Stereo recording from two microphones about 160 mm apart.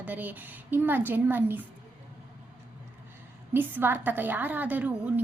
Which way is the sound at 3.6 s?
10° right (ahead or behind).